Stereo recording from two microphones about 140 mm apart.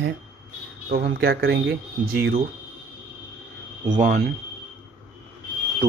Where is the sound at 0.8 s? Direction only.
90° right.